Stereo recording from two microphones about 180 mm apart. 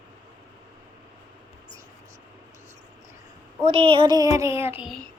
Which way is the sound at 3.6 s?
30° right (ahead or behind).